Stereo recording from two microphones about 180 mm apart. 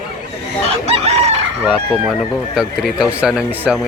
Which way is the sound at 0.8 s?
35° right (ahead or behind).